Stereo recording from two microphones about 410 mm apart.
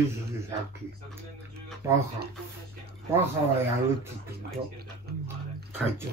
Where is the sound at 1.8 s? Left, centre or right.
Centre.